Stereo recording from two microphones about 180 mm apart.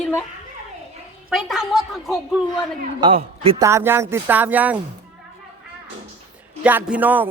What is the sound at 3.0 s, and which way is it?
Speech, 30° right (ahead or behind).